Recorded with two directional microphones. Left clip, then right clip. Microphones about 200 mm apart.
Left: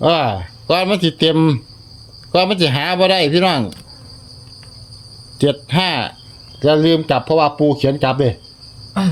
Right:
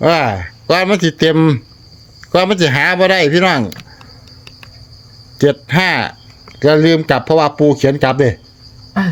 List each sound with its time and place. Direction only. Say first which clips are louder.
0.0 s speech: right 2 dB; 30° right (ahead or behind)
5.4 s speech: right 4 dB; 25° right (ahead or behind)